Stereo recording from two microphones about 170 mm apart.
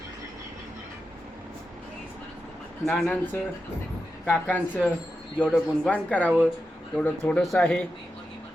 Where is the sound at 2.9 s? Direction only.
5° left (ahead or behind).